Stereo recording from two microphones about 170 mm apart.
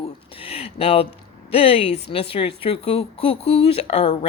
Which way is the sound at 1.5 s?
35° left (ahead or behind).